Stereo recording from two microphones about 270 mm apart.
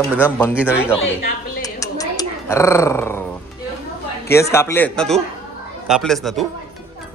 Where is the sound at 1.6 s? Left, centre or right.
Centre.